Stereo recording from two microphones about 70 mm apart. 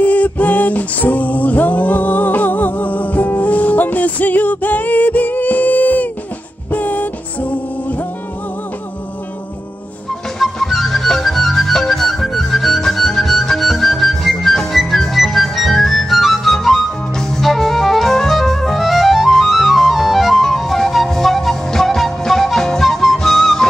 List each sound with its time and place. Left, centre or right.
0.0 s music: left
10.4 s music: centre